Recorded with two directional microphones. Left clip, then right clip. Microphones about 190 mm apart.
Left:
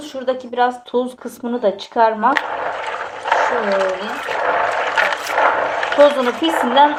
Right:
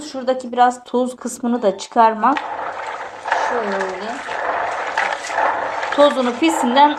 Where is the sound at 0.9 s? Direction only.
35° right (ahead or behind).